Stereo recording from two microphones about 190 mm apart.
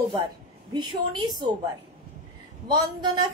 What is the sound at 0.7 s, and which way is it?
Speech, 20° right (ahead or behind).